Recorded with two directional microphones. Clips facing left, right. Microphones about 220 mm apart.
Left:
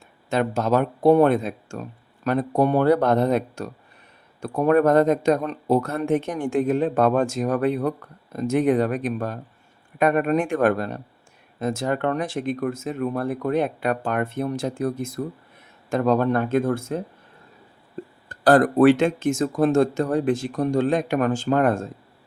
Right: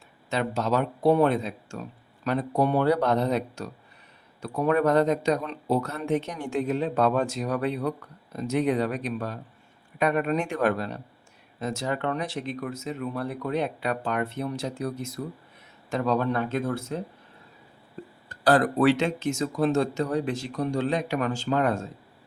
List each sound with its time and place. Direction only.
0.3 s speech: 50° left (ahead or behind)
18.3 s speech: 50° left (ahead or behind)